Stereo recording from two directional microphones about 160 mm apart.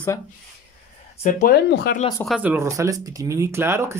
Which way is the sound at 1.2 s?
50° left (ahead or behind).